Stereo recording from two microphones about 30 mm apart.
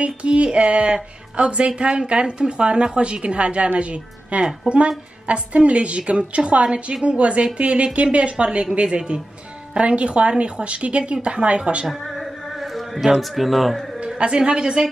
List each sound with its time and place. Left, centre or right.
0.0 s a woman's voice: right
11.9 s a sound: centre
13.2 s speech: centre
13.9 s a woman's voice: right